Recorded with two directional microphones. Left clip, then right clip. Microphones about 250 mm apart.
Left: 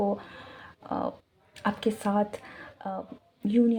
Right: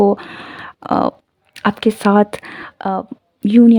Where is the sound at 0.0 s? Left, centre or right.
Right.